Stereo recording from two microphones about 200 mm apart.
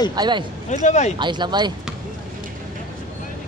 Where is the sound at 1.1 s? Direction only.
20° right (ahead or behind).